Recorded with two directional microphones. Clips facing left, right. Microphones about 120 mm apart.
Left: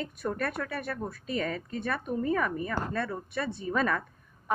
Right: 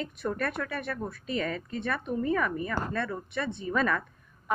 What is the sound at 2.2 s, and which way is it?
Speech, 30° left (ahead or behind).